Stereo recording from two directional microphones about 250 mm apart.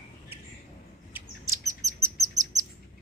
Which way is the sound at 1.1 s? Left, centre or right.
Centre.